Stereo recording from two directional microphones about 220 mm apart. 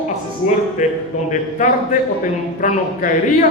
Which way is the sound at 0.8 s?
35° left (ahead or behind).